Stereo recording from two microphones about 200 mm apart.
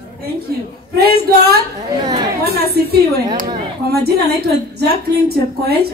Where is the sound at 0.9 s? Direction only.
50° right (ahead or behind).